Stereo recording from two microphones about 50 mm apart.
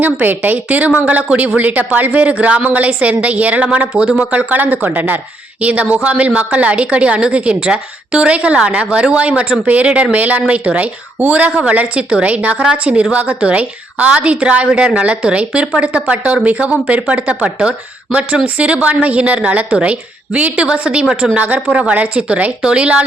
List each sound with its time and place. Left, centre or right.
0.0 s a woman's voice: right; by 4.3 s centre
4.3 s a woman's voice: right